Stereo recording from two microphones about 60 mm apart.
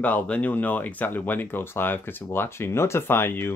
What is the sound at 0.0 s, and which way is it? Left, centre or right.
Speech, left.